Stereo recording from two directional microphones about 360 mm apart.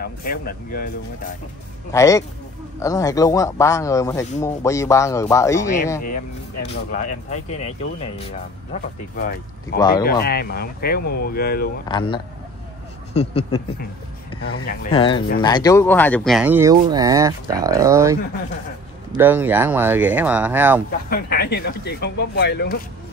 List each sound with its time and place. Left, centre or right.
0.0 s speech: left
1.9 s speech: centre
6.7 s speech: left
9.8 s speech: centre
10.2 s speech: left
11.9 s speech: centre
21.1 s speech: left